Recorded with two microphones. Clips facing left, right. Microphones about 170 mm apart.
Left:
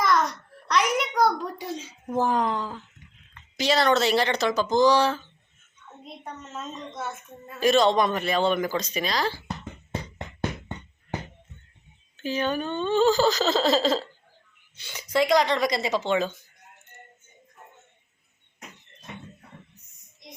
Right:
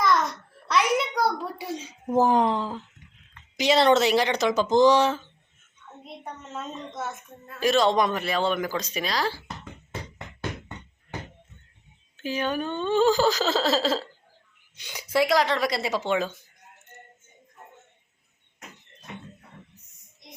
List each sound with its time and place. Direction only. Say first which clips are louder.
0.0 s a sound: even; centre (ahead or behind)
2.3 s speech: right 3 dB; 20° right (ahead or behind)
6.2 s speech: right 1 dB; 10° right (ahead or behind)
12.1 s speech: left 1 dB; 10° right (ahead or behind)